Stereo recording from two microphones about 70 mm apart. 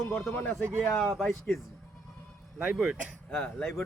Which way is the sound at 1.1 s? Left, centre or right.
Centre.